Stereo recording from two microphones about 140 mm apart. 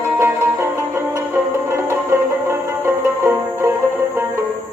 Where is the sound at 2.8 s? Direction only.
15° right (ahead or behind).